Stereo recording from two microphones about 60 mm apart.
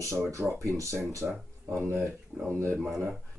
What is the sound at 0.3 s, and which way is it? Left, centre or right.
Speech, right.